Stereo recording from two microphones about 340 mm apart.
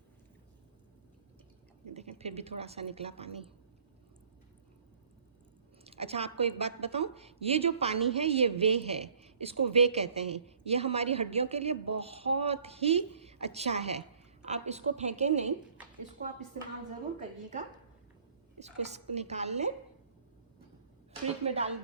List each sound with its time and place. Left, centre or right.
1.9 s a woman's voice: centre
5.8 s a sound: centre
6.4 s a woman's voice: centre
18.6 s a woman's voice: centre
21.2 s a woman's voice: centre